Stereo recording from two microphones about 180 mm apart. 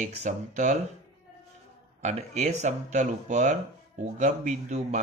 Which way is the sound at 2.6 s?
40° right (ahead or behind).